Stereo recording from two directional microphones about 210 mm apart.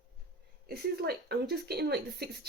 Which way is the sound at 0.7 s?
50° right (ahead or behind).